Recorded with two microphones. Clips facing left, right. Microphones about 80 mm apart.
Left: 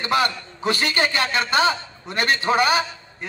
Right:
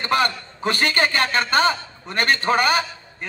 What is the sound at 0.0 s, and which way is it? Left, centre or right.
A man's voice, right.